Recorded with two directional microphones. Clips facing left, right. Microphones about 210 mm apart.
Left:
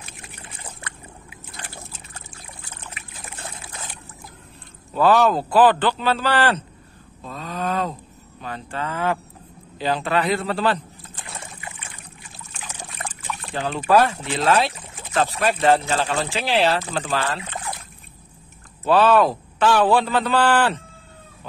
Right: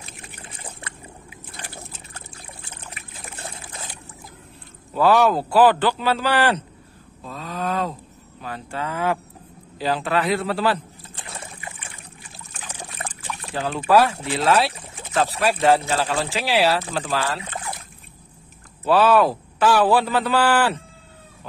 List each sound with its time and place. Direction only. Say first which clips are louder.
2.1 s trickle: right 1 dB; 35° right (ahead or behind)
4.9 s a man's voice: even; 10° right (ahead or behind)
7.2 s a man's voice: even; centre (ahead or behind)
12.6 s trickle: even; 35° right (ahead or behind)
13.7 s a man's voice: even; 5° right (ahead or behind)
18.9 s a man's voice: even; 5° right (ahead or behind)